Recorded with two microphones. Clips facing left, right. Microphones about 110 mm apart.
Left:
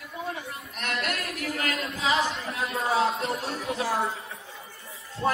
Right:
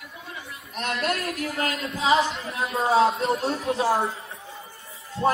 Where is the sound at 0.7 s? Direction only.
30° right (ahead or behind).